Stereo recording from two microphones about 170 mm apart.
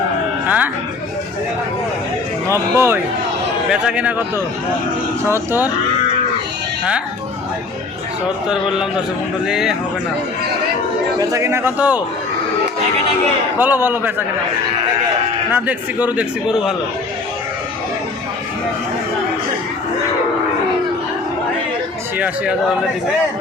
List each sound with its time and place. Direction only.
0.4 s a sound: 10° right (ahead or behind)
2.5 s speech: 15° right (ahead or behind)
5.3 s speech: 15° right (ahead or behind)
9.5 s speech: centre (ahead or behind)
11.2 s speech: 20° right (ahead or behind)
13.6 s speech: 10° right (ahead or behind)
15.5 s speech: 10° right (ahead or behind)